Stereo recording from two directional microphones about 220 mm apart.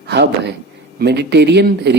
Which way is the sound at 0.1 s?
50° right (ahead or behind).